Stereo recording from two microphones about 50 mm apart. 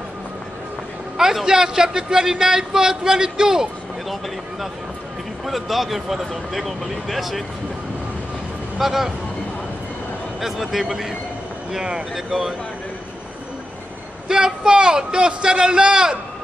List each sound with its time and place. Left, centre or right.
1.1 s a man's voice: centre
5.4 s speech: centre
8.7 s speech: centre
10.4 s a man's voice: centre
14.2 s a man's voice: centre